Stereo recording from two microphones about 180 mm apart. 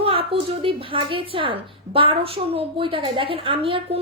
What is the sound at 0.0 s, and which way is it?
A child's voice, 30° right (ahead or behind).